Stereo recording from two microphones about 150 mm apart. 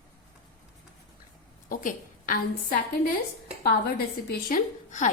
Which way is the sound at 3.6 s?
90° left.